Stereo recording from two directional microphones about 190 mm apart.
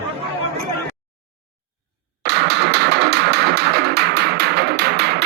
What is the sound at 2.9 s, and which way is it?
Music, 60° right (ahead or behind).